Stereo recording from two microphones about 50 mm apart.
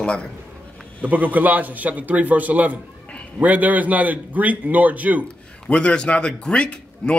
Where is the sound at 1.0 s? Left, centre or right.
Right.